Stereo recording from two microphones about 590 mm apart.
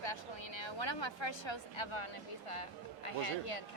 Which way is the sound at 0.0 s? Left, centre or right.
Left.